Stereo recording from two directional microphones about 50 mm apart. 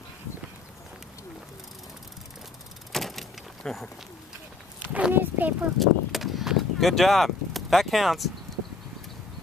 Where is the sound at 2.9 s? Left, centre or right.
Centre.